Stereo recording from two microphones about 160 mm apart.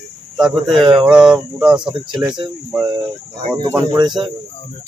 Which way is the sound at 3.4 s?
30° right (ahead or behind).